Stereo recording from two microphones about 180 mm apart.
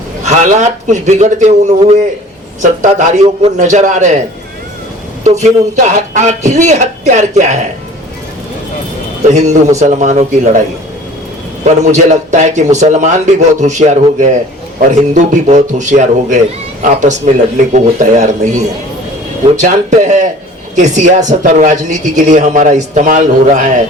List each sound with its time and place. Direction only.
0.3 s speech: 40° right (ahead or behind)
2.6 s speech: 45° right (ahead or behind)
5.2 s speech: 40° right (ahead or behind)
9.3 s speech: 40° right (ahead or behind)
11.6 s speech: 40° right (ahead or behind)